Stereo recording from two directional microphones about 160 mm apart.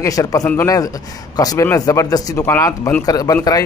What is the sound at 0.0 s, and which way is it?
Speech, 20° left (ahead or behind).